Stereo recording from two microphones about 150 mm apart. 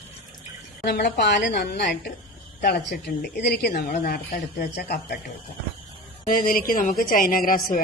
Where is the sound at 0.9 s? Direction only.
90° left.